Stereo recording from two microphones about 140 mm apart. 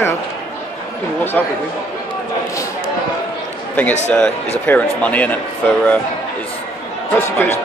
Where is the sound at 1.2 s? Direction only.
15° left (ahead or behind).